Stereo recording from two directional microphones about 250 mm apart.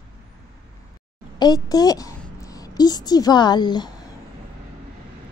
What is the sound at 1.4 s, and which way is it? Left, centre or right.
A child's voice, centre.